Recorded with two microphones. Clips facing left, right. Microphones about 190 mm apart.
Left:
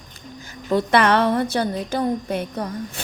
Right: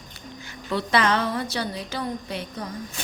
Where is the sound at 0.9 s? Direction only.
60° left (ahead or behind).